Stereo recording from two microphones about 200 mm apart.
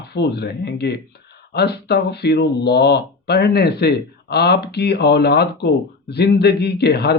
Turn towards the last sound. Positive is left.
turn(degrees=55)  # may be behind; listen again after turning